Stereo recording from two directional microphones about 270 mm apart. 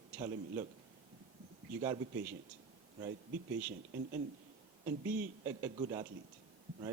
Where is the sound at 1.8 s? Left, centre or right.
Centre.